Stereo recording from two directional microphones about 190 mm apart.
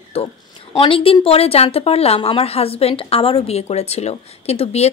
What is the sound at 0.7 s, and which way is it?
Speech, 30° left (ahead or behind).